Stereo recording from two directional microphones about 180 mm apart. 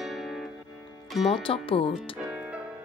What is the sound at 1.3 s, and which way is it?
Speech, 30° left (ahead or behind).